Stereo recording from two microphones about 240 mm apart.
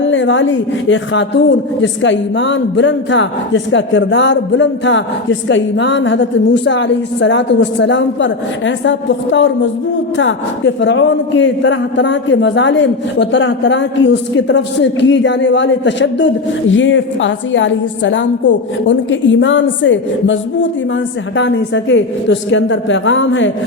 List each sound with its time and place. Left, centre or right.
0.0 s a man's voice: left